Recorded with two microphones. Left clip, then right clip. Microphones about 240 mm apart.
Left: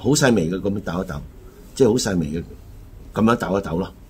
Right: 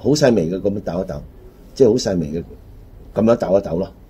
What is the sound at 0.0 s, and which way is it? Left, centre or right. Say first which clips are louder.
Speech: right 3 dB; centre.